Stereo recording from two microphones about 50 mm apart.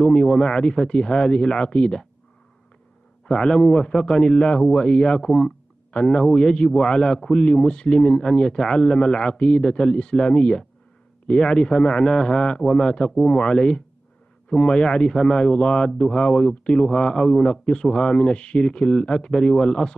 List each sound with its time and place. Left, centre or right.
0.0 s a man's voice: centre
3.3 s a man's voice: centre